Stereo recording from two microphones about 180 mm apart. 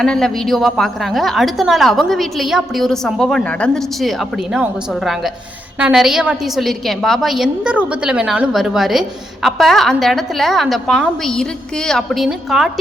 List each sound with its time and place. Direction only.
0.0 s a woman's voice: 5° left (ahead or behind)